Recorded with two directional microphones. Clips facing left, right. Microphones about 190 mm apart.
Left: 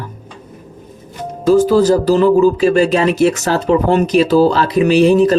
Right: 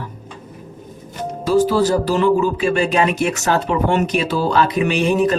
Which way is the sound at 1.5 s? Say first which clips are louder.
Left 5 dB; 45° left (ahead or behind).